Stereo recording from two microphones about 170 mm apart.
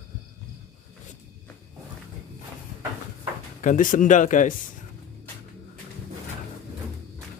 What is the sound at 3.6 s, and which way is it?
Speech, 50° left (ahead or behind).